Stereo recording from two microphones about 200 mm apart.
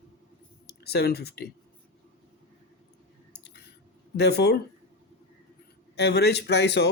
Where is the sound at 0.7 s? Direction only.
55° left (ahead or behind).